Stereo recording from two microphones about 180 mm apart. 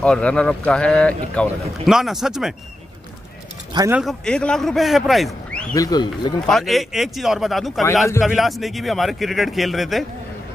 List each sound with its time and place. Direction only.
0.0 s speech: 5° left (ahead or behind)
3.9 s speech: centre (ahead or behind)
5.8 s speech: 20° left (ahead or behind)
6.4 s speech: centre (ahead or behind)